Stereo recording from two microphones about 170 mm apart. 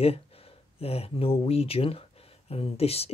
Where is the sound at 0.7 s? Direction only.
35° left (ahead or behind).